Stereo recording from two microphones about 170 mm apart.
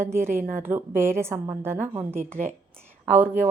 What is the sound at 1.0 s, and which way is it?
A woman's voice, 15° right (ahead or behind).